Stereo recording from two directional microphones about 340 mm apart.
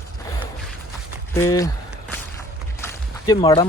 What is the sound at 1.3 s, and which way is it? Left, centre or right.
Speech, centre.